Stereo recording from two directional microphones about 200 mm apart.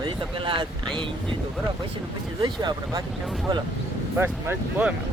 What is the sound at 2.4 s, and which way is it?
Speech, 20° right (ahead or behind).